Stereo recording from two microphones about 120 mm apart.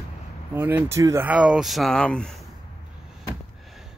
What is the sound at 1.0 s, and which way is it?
Speech, 25° right (ahead or behind).